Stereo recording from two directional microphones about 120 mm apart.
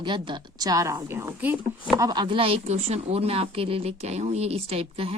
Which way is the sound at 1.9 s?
35° right (ahead or behind).